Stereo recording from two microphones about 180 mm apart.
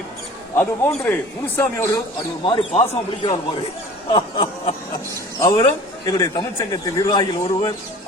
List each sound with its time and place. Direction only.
0.5 s a man's voice: 10° left (ahead or behind)
2.5 s a man's voice: 30° left (ahead or behind)